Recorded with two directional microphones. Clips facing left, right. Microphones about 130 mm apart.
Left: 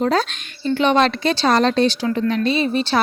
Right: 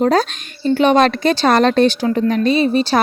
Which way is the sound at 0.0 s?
40° right (ahead or behind).